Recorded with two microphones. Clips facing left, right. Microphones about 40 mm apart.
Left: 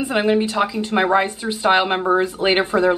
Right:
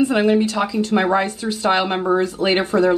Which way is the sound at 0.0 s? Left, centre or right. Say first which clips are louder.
Right 2 dB; centre.